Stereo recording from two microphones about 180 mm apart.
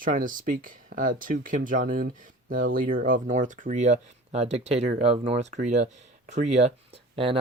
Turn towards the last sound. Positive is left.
turn(degrees=-30)  # may be behind; listen again after turning